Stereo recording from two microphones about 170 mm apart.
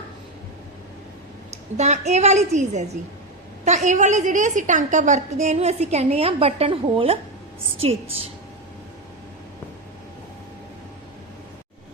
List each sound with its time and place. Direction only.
1.5 s a woman's voice: 40° right (ahead or behind)